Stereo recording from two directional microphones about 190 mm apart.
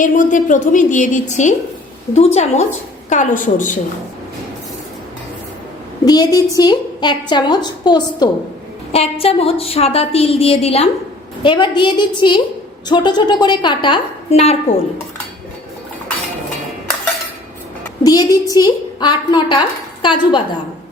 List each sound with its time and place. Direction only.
0.0 s a woman's voice: 40° left (ahead or behind)
6.1 s a woman's voice: 20° left (ahead or behind)
18.0 s a woman's voice: 20° left (ahead or behind)